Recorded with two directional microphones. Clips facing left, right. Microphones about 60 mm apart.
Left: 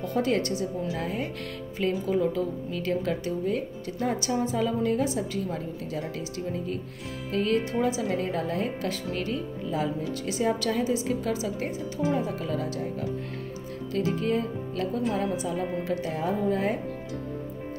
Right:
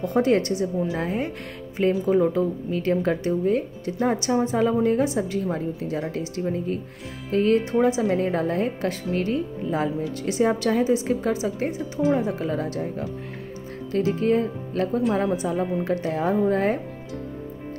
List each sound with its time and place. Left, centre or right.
0.0 s a woman's voice: right